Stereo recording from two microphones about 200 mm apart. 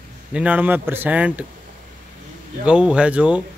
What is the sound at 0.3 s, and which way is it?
Speech, 5° right (ahead or behind).